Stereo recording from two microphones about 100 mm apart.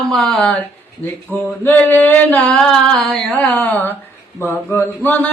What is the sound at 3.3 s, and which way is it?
Music, 15° left (ahead or behind).